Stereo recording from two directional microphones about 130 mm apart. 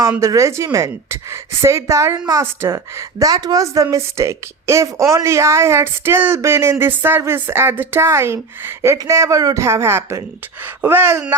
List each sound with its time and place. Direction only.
0.2 s a woman's voice: 25° right (ahead or behind)